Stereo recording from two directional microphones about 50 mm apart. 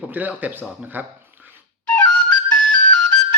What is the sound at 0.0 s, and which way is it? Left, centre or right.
Speech, right.